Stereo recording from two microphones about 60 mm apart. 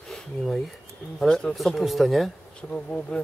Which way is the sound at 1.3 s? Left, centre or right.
Centre.